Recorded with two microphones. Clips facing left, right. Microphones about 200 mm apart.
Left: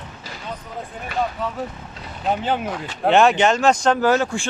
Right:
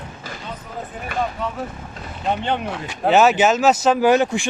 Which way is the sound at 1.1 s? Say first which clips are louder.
Even; 50° right (ahead or behind).